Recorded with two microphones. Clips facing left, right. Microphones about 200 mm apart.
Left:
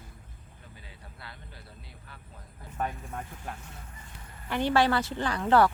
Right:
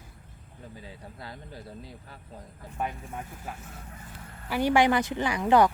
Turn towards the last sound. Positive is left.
turn(degrees=-15)  # may be behind; listen again after turning